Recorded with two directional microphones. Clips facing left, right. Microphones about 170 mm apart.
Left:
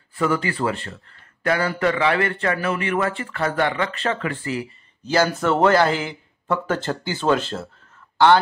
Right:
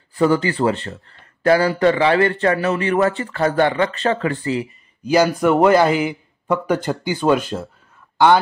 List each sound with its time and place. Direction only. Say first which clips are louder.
0.1 s speech: right 5 dB; 30° right (ahead or behind)
5.0 s a man's voice: right 4 dB; 15° right (ahead or behind)